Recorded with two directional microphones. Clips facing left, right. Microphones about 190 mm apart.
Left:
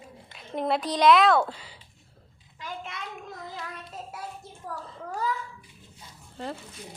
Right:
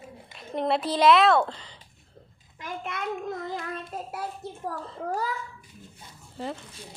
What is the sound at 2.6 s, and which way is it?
Child singing, 55° right (ahead or behind).